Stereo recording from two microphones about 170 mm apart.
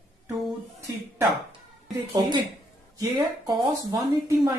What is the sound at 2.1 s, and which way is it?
A woman's voice, 25° right (ahead or behind).